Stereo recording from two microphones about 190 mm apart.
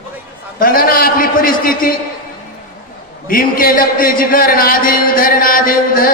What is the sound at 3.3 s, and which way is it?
A man's voice, 50° left (ahead or behind).